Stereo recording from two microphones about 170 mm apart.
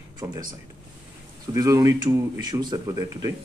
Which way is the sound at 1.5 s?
20° right (ahead or behind).